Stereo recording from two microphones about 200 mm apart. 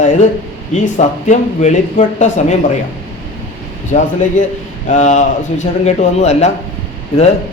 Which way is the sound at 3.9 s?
40° left (ahead or behind).